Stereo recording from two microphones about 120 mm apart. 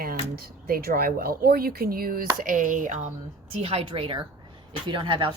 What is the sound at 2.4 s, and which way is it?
Speech, 90° right.